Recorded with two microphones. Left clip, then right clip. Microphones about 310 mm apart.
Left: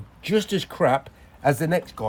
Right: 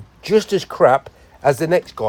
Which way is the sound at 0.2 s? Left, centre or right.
Centre.